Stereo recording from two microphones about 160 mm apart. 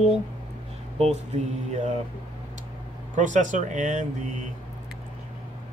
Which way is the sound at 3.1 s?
50° right (ahead or behind).